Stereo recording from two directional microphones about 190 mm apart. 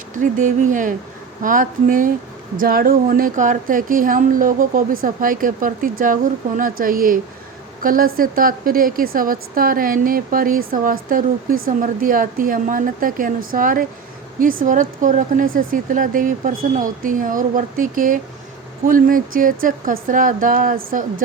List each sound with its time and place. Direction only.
0.1 s a woman's voice: 40° right (ahead or behind)